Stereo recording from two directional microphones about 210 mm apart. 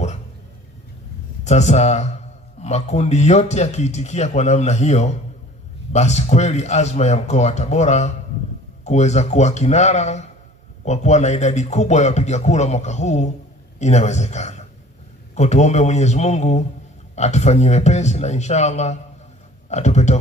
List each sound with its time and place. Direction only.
1.4 s speech: 30° left (ahead or behind)